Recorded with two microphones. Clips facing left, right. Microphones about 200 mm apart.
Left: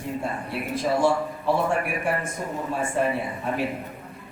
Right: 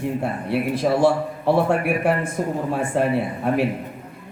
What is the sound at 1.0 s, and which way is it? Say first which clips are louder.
A man's voice: right 4 dB; 65° right (ahead or behind).